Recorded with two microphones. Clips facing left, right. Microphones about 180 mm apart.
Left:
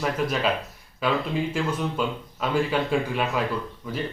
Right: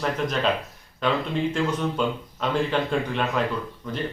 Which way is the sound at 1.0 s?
5° left (ahead or behind).